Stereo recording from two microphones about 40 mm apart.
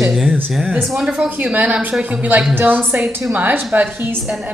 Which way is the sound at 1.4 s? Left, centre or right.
Right.